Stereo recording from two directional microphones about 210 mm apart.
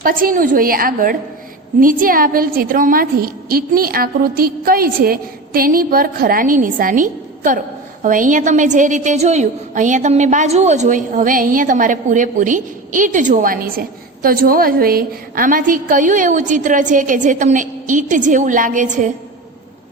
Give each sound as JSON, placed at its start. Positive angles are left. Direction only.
{"t": 0.0, "sound": "a woman's voice", "side_deg": -40}